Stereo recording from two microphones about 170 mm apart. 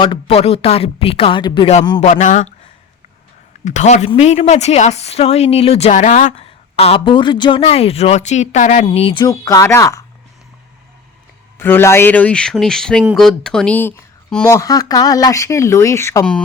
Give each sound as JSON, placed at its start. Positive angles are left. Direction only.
{"t": 0.0, "sound": "speech", "side_deg": 30}
{"t": 2.0, "sound": "speech", "side_deg": 40}
{"t": 3.6, "sound": "speech", "side_deg": 45}
{"t": 9.2, "sound": "speech", "side_deg": 20}
{"t": 11.6, "sound": "speech", "side_deg": 15}
{"t": 14.4, "sound": "speech", "side_deg": 20}